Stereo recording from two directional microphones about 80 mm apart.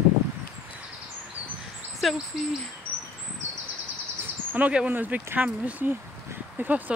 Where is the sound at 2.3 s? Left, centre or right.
Centre.